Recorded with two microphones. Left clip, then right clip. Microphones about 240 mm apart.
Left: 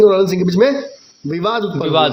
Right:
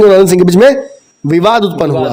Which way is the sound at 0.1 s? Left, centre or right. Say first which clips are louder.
Right 9 dB; right.